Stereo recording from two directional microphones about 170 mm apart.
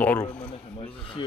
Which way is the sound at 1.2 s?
30° left (ahead or behind).